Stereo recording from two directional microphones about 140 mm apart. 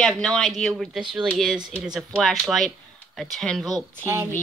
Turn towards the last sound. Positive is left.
turn(degrees=-20)  # may be behind; listen again after turning